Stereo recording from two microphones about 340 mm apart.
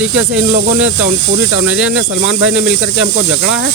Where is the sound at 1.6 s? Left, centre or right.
Centre.